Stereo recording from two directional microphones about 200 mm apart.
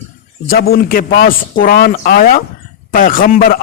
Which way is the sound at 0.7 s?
45° left (ahead or behind).